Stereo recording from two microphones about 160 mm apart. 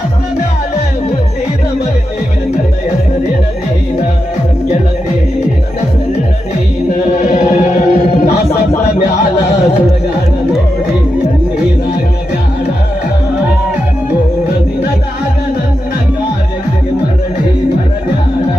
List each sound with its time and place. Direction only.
7.1 s music: 45° left (ahead or behind)